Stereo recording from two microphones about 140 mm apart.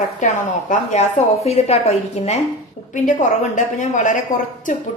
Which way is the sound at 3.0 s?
65° left (ahead or behind).